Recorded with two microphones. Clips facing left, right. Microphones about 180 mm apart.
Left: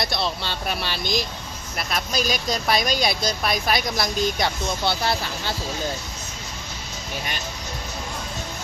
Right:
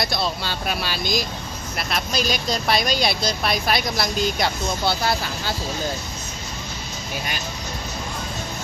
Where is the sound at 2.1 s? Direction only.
45° left (ahead or behind).